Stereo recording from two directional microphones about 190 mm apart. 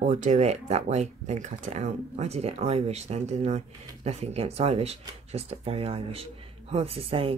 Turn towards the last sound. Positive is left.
turn(degrees=-30)  # may be behind; listen again after turning